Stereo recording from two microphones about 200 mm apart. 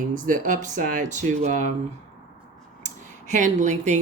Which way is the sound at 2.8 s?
35° right (ahead or behind).